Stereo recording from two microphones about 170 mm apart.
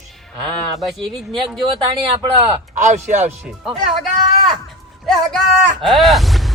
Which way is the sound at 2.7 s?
45° right (ahead or behind).